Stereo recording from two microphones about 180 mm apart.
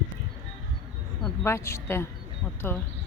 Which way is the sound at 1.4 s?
15° left (ahead or behind).